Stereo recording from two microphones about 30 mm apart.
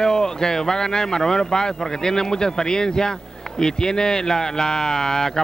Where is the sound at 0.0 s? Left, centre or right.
Left.